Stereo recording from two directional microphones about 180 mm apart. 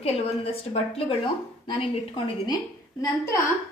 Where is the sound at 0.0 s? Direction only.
35° left (ahead or behind).